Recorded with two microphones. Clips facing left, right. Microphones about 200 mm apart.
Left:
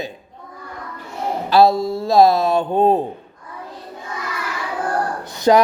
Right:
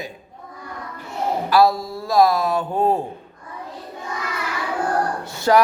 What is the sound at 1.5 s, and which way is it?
Speech, 25° left (ahead or behind).